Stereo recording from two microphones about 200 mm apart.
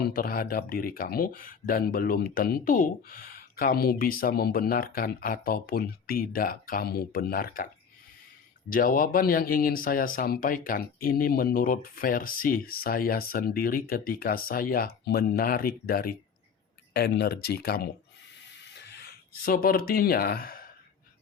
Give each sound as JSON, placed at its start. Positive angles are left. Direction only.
{"t": 0.0, "sound": "speech", "side_deg": 45}
{"t": 8.7, "sound": "speech", "side_deg": 45}
{"t": 18.4, "sound": "a sound", "side_deg": 60}